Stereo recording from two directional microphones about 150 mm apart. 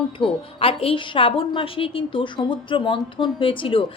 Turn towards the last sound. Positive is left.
turn(degrees=35)  # may be behind; listen again after turning